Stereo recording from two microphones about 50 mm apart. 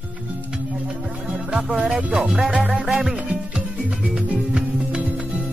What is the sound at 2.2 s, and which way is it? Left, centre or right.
Music, centre.